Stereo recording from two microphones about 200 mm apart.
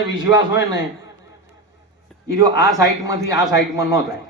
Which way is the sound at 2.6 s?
15° right (ahead or behind).